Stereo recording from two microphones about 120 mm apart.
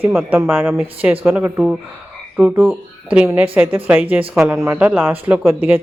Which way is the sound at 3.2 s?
15° right (ahead or behind).